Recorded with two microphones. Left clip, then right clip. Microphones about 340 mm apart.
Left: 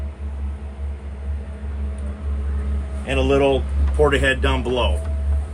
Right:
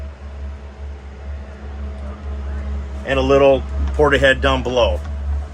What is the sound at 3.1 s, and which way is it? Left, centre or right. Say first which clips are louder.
Speech: right 5 dB; right.